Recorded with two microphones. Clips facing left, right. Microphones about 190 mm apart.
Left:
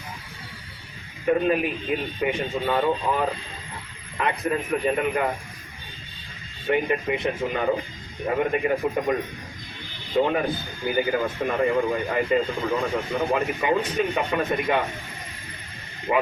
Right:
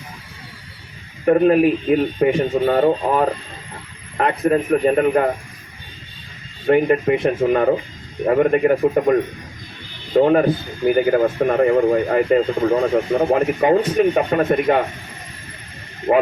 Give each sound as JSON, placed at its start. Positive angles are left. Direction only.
{"t": 1.2, "sound": "speech", "side_deg": -55}
{"t": 6.7, "sound": "speech", "side_deg": -50}
{"t": 10.2, "sound": "a man's voice", "side_deg": -55}
{"t": 16.1, "sound": "speech", "side_deg": -45}